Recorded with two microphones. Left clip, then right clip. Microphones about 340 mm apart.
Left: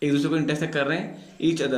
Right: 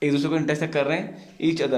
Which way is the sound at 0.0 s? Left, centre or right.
Centre.